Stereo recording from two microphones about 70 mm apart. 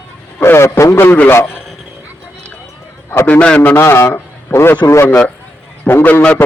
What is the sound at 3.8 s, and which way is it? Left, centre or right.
Speech, left.